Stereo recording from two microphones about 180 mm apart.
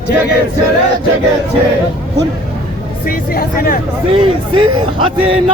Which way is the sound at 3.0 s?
55° left (ahead or behind).